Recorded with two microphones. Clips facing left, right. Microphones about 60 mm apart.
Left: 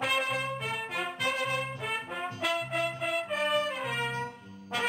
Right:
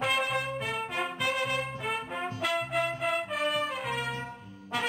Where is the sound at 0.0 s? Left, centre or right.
Centre.